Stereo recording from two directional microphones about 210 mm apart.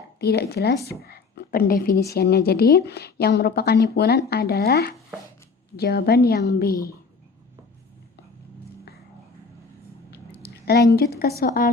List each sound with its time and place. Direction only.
0.2 s a woman's voice: 50° left (ahead or behind)
10.1 s a sound: 50° left (ahead or behind)
10.9 s a woman's voice: 45° left (ahead or behind)